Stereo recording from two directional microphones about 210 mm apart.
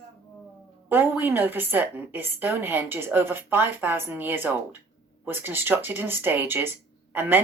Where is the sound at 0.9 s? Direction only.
10° right (ahead or behind).